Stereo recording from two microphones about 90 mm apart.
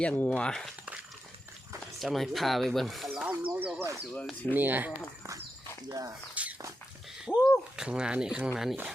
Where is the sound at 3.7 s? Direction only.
30° right (ahead or behind).